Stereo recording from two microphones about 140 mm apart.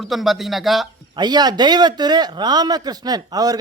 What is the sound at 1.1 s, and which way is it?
A man's voice, 30° right (ahead or behind).